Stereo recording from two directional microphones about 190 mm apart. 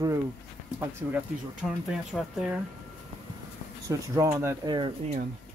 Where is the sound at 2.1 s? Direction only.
5° left (ahead or behind).